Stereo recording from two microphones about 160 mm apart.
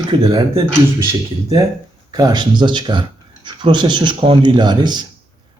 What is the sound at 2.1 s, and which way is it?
Speech, 25° right (ahead or behind).